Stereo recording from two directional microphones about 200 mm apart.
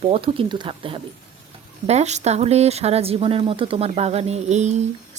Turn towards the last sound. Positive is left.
turn(degrees=-35)  # may be behind; listen again after turning